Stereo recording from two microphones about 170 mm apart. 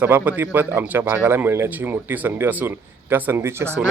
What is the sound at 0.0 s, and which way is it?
Speech, 10° right (ahead or behind).